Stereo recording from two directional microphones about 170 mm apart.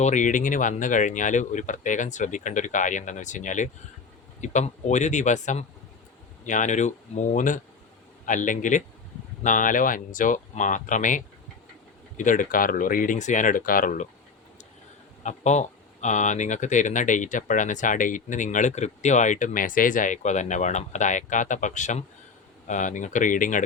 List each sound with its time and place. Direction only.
0.0 s speech: 45° left (ahead or behind)
15.2 s speech: 45° left (ahead or behind)